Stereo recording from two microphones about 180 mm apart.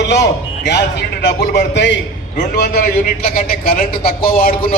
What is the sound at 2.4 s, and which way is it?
A man's voice, 60° left (ahead or behind).